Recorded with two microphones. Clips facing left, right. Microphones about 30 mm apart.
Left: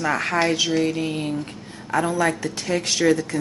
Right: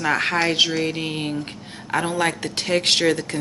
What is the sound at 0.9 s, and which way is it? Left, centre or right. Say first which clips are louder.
A woman's voice: left 1 dB; right.